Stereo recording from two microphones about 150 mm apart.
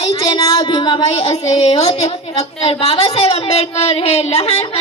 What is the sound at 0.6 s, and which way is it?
A woman's voice, 30° left (ahead or behind).